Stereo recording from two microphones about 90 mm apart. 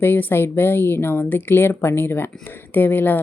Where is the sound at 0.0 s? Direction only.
25° left (ahead or behind).